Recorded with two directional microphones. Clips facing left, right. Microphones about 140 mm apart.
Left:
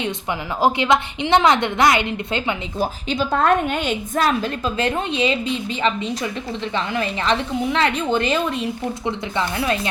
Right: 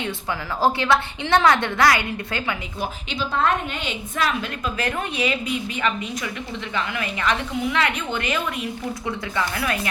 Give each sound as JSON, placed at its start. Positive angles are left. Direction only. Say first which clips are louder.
{"t": 0.0, "sound": "a woman's voice", "louder": "left 3 dB", "side_deg": 20}
{"t": 2.7, "sound": "a woman's voice", "louder": "left 6 dB", "side_deg": 35}